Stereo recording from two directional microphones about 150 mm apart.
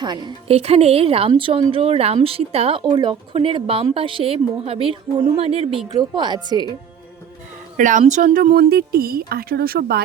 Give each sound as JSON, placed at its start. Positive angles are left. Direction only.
{"t": 0.0, "sound": "a woman's voice", "side_deg": -30}
{"t": 0.5, "sound": "speech", "side_deg": -45}
{"t": 2.8, "sound": "speech", "side_deg": -30}
{"t": 6.0, "sound": "a woman's voice", "side_deg": -30}
{"t": 7.8, "sound": "speech", "side_deg": -60}